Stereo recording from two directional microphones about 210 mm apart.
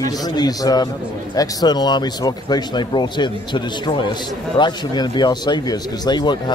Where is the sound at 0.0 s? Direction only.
20° left (ahead or behind).